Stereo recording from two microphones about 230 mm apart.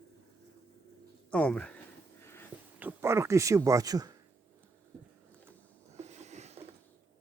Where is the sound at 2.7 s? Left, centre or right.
Centre.